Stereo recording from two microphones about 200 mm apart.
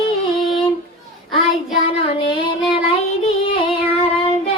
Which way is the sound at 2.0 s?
30° left (ahead or behind).